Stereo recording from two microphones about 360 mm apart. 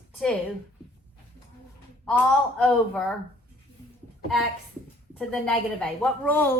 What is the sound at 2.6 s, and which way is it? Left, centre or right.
Speech, centre.